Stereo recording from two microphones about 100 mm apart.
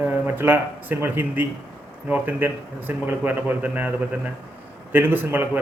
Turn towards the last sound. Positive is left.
turn(degrees=-20)  # may be behind; listen again after turning